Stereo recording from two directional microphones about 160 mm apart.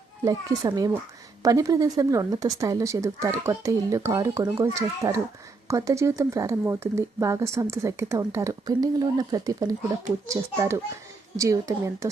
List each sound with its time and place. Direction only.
0.3 s speech: 25° right (ahead or behind)